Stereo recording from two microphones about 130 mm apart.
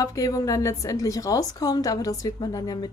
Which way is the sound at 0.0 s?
25° left (ahead or behind).